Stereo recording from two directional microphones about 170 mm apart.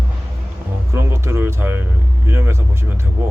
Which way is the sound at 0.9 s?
15° right (ahead or behind).